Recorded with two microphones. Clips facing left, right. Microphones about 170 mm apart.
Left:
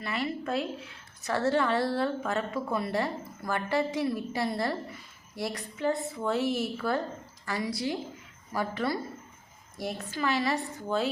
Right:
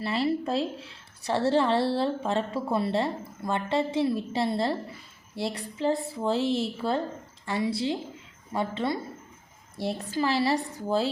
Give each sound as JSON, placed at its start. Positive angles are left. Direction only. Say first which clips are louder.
{"t": 0.0, "sound": "a woman's voice", "louder": "right 6 dB", "side_deg": -30}